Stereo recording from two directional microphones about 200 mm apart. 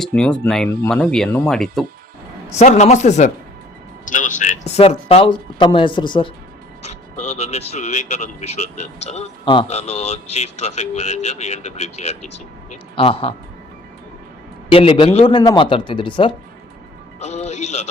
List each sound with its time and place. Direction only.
0.0 s speech: 5° left (ahead or behind)
2.5 s a man's voice: 35° left (ahead or behind)
6.8 s a man's voice: 35° left (ahead or behind)
14.7 s a man's voice: 30° left (ahead or behind)
17.2 s a man's voice: 35° left (ahead or behind)